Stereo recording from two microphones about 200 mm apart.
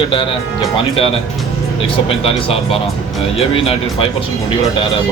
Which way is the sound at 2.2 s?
30° left (ahead or behind).